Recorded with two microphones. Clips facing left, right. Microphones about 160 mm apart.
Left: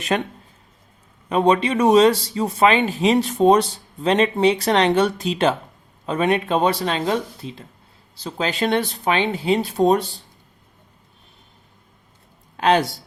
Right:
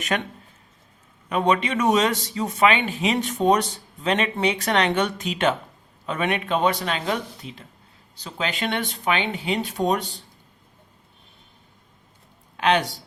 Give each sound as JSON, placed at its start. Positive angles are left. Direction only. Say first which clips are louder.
{"t": 0.1, "sound": "speech", "louder": "left 4 dB", "side_deg": 30}
{"t": 1.3, "sound": "speech", "louder": "left 4 dB", "side_deg": 30}
{"t": 12.5, "sound": "a sound", "louder": "left 3 dB", "side_deg": 40}